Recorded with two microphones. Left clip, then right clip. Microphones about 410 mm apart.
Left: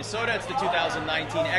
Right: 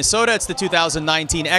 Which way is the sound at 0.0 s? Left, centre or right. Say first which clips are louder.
Right 10 dB; right.